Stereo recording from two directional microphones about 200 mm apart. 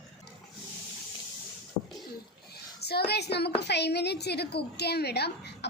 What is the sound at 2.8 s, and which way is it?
A child's voice, 55° left (ahead or behind).